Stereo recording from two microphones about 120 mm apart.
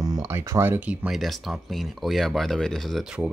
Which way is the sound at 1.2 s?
Centre (ahead or behind).